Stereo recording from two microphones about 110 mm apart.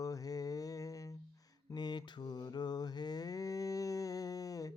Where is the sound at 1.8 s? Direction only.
40° left (ahead or behind).